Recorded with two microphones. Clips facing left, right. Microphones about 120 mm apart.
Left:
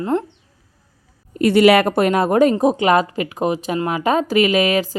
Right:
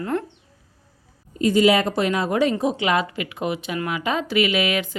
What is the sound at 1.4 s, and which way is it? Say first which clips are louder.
A woman's voice: left 5 dB; 70° left (ahead or behind).